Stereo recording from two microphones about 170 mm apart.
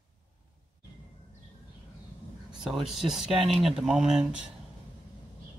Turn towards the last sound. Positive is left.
turn(degrees=-5)  # may be behind; listen again after turning